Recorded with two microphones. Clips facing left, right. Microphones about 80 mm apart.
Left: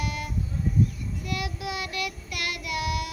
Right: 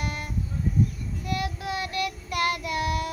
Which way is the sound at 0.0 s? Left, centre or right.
Right.